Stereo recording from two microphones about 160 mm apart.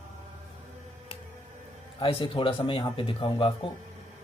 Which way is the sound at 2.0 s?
35° left (ahead or behind).